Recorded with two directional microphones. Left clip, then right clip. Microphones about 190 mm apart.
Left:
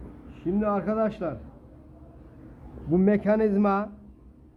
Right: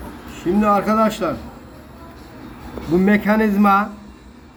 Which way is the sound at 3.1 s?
55° left (ahead or behind).